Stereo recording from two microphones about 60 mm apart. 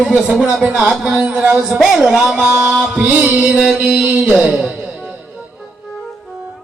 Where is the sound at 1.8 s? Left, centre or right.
Centre.